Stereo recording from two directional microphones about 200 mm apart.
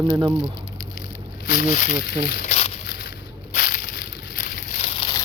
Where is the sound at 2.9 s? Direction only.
50° left (ahead or behind); by 5.1 s 35° left (ahead or behind).